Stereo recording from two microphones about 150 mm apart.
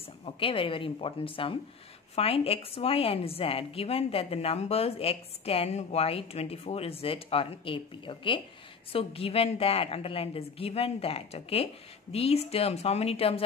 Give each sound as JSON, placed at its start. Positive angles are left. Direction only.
{"t": 0.2, "sound": "a woman's voice", "side_deg": 40}